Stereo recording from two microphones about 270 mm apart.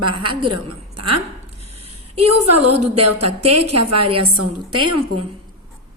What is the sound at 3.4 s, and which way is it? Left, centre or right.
A woman's voice, right.